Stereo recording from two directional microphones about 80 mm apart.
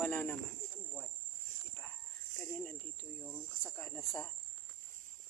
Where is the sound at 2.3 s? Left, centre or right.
Left.